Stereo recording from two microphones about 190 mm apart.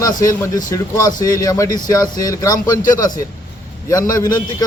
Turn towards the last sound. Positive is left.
turn(degrees=15)  # may be behind; listen again after turning